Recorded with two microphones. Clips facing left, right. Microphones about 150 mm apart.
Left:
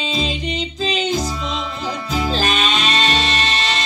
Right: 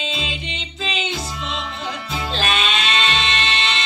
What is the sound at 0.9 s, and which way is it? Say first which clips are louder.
Music: left 5 dB; 40° left (ahead or behind).